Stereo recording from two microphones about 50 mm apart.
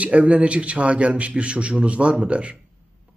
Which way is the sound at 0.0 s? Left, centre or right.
Right.